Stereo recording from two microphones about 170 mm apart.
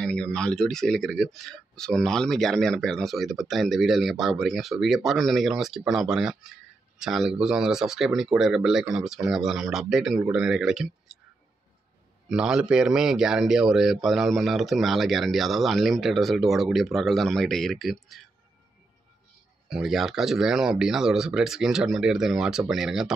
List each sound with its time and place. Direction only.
0.0 s speech: 5° left (ahead or behind)
12.3 s speech: 5° right (ahead or behind)
19.7 s speech: centre (ahead or behind)